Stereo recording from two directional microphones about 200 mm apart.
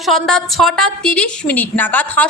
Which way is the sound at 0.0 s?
Centre (ahead or behind).